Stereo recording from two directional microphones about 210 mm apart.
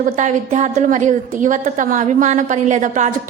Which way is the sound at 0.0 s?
35° right (ahead or behind).